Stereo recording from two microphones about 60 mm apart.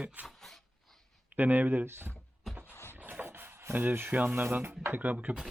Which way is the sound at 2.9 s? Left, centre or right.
Right.